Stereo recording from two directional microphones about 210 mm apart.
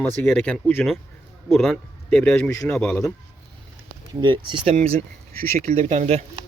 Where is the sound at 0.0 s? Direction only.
5° left (ahead or behind).